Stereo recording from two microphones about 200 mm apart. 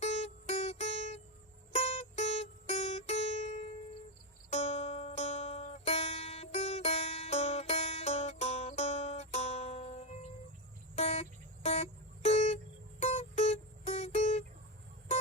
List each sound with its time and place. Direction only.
0.0 s music: 35° left (ahead or behind)